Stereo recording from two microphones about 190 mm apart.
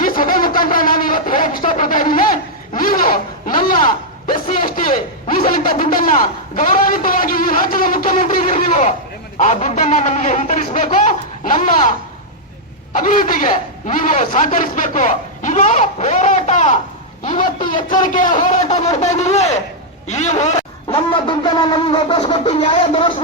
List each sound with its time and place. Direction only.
0.0 s a sound: 45° left (ahead or behind)
9.4 s a man's voice: 40° left (ahead or behind)
17.8 s a man's voice: 45° left (ahead or behind)
20.1 s shofar: 40° left (ahead or behind)